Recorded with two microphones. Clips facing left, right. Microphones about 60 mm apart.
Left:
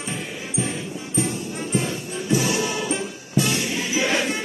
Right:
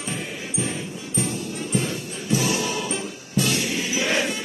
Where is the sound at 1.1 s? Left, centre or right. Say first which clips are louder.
Left 2 dB; left.